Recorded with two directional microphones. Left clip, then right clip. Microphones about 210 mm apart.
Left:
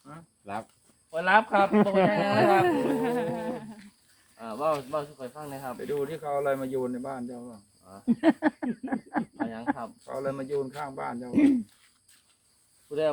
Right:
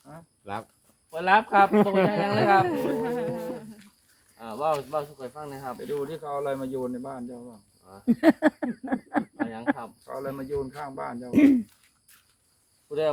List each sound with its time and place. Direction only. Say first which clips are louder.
0.0 s cricket: right 1 dB; 5° left (ahead or behind)
1.1 s speech: right 2 dB; 35° right (ahead or behind)
1.7 s speech: right 1 dB; 50° right (ahead or behind)
2.0 s speech: even; 30° right (ahead or behind)
2.6 s a sound: left 1 dB; 50° left (ahead or behind)
4.4 s speech: right 1 dB; 40° right (ahead or behind)
6.0 s speech: left 4 dB; centre (ahead or behind)
8.0 s speech: right 3 dB; 55° right (ahead or behind); by 9.9 s 35° right (ahead or behind)
10.0 s speech: left 2 dB; 5° left (ahead or behind)
11.3 s speech: right 4 dB; 45° right (ahead or behind)